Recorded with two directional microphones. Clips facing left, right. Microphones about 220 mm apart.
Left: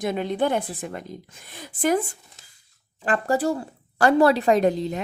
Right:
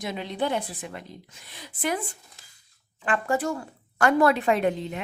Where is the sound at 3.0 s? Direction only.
35° left (ahead or behind).